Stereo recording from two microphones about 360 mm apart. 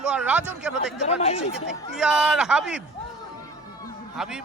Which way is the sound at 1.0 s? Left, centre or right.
Centre.